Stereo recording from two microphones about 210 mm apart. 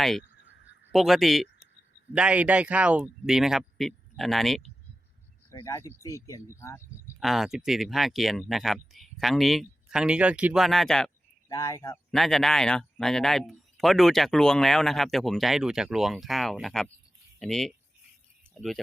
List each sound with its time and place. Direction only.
0.0 s speech: centre (ahead or behind)
5.5 s speech: 15° left (ahead or behind)
7.2 s speech: centre (ahead or behind)
11.4 s speech: 15° left (ahead or behind)
12.1 s speech: centre (ahead or behind)